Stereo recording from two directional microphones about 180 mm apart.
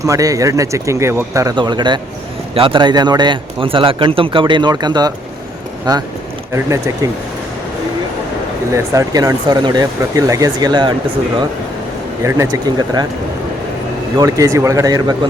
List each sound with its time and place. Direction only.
0.0 s a man's voice: 20° right (ahead or behind)
6.5 s speech: 15° right (ahead or behind)
8.7 s a man's voice: 20° right (ahead or behind)
12.2 s a man's voice: 15° right (ahead or behind)
14.2 s a man's voice: 20° right (ahead or behind)